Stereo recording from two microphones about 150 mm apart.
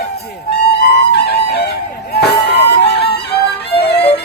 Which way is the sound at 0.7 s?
90° left.